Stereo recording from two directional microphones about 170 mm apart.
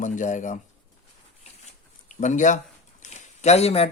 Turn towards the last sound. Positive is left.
turn(degrees=35)  # may be behind; listen again after turning